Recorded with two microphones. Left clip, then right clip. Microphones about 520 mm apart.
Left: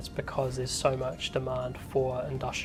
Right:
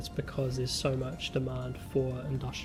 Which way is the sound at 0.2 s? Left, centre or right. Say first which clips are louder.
Left 4 dB; left.